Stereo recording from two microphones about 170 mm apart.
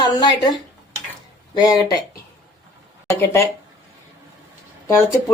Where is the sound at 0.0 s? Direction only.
25° left (ahead or behind).